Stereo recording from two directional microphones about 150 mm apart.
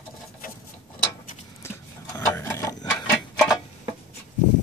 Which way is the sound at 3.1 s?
Centre (ahead or behind).